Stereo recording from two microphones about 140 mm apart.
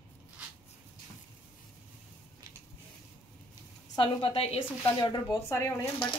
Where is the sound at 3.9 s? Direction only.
35° left (ahead or behind).